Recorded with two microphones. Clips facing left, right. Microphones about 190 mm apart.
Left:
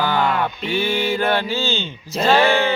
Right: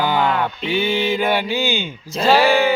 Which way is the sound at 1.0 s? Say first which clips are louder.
Right 1 dB; 15° right (ahead or behind).